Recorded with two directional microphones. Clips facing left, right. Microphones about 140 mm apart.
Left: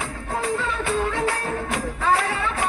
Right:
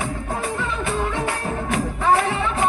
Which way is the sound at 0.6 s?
20° right (ahead or behind).